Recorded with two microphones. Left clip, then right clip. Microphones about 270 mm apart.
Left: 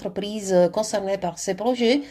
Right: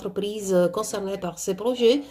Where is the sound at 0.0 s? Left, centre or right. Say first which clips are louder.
Right 1 dB; left.